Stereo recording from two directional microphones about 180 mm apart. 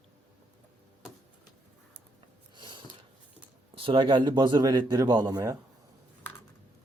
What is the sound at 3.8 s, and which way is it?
Speech, 30° right (ahead or behind).